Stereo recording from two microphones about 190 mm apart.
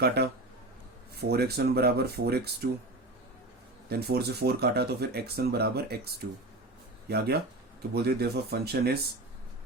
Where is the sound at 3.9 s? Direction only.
60° right (ahead or behind).